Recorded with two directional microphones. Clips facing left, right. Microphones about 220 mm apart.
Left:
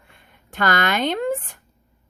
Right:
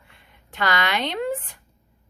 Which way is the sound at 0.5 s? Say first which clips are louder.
Left 3 dB; 50° left (ahead or behind).